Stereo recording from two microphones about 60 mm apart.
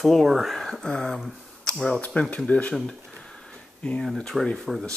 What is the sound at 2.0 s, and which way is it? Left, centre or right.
Speech, left.